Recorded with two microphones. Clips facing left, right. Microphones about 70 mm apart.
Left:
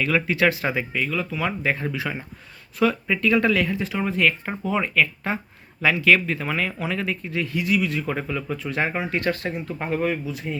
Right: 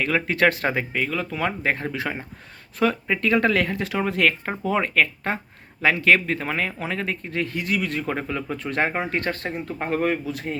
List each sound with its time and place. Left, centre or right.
0.0 s speech: right
3.8 s speech: right
5.8 s speech: right